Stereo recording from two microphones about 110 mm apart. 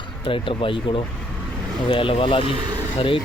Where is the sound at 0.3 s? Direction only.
50° left (ahead or behind).